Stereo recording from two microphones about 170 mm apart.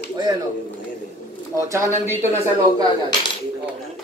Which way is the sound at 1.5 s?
15° right (ahead or behind).